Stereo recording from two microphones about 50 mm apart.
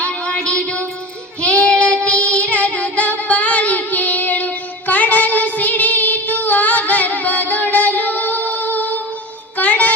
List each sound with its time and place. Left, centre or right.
0.0 s child singing: left
3.2 s music: left